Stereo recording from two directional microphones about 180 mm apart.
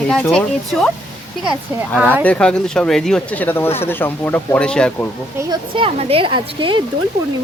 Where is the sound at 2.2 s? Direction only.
5° left (ahead or behind).